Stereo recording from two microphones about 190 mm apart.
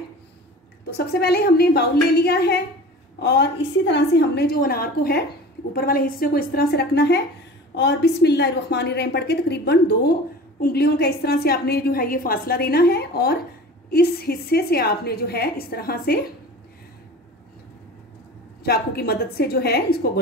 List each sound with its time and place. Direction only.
0.8 s a woman's voice: 55° left (ahead or behind)
18.6 s a woman's voice: 55° left (ahead or behind)